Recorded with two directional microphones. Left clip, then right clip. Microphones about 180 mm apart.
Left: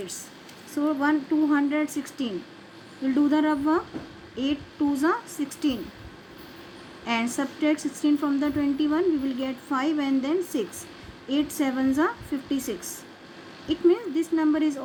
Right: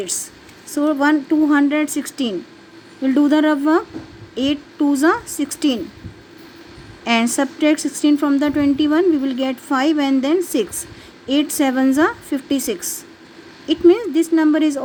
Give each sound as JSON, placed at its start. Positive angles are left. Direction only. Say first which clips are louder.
{"t": 0.7, "sound": "a woman's voice", "louder": "right 8 dB", "side_deg": -55}
{"t": 7.0, "sound": "a woman's voice", "louder": "right 9 dB", "side_deg": -60}